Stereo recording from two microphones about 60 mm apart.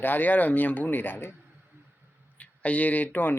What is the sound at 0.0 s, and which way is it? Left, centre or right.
Speech, left.